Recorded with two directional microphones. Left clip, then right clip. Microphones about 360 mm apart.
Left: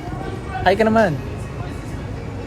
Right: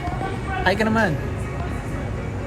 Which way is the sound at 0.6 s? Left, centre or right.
Left.